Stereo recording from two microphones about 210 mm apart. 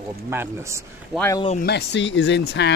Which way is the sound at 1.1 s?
10° left (ahead or behind).